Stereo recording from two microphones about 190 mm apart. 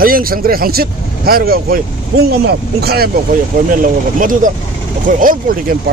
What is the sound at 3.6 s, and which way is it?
Speech, 45° right (ahead or behind).